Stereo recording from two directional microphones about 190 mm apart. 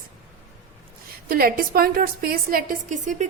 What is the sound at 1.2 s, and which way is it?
A woman's voice, 50° right (ahead or behind).